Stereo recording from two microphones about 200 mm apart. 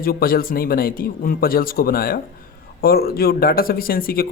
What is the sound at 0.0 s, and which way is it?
Speech, 45° left (ahead or behind).